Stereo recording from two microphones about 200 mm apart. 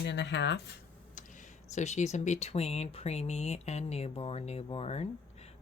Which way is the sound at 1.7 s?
35° left (ahead or behind).